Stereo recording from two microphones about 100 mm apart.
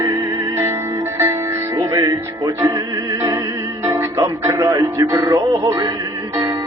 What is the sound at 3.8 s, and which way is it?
Music, 35° right (ahead or behind).